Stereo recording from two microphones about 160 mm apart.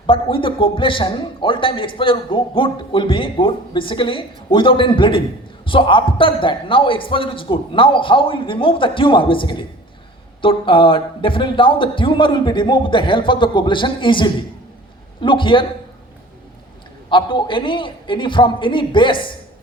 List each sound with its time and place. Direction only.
0.1 s a man's voice: 35° left (ahead or behind)
17.1 s a man's voice: 30° left (ahead or behind)